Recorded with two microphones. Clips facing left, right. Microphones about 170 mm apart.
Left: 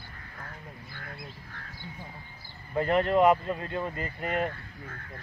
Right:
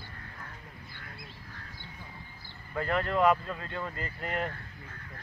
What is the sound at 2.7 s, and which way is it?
Speech, 20° left (ahead or behind).